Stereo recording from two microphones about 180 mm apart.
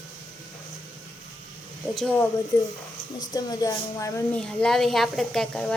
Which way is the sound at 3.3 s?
20° left (ahead or behind).